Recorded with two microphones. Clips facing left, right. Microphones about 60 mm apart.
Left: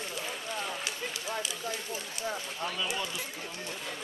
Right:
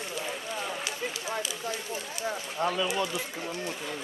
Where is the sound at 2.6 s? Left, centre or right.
Right.